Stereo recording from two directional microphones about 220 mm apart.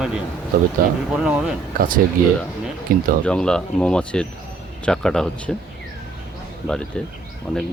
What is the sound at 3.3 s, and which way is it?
Speech, 5° left (ahead or behind).